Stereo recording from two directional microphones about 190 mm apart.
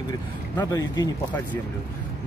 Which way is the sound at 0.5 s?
20° left (ahead or behind).